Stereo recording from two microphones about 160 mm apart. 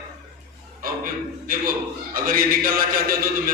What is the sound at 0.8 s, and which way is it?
A man's voice, 60° right (ahead or behind).